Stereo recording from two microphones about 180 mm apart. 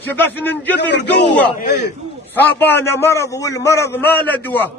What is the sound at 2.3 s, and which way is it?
A man's voice, 10° left (ahead or behind).